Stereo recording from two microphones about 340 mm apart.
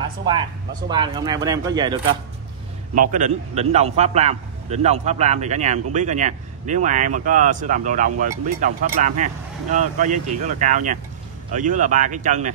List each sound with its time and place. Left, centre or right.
0.8 s speech: centre
3.0 s speech: right